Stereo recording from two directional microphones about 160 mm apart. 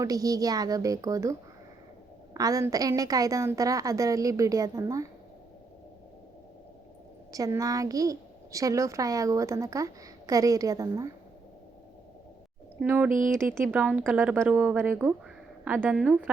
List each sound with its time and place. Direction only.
0.0 s a woman's voice: 20° right (ahead or behind)
7.3 s a woman's voice: 20° right (ahead or behind)
12.8 s a woman's voice: 10° right (ahead or behind)
13.1 s speech: 55° right (ahead or behind)
13.4 s a woman's voice: 15° right (ahead or behind)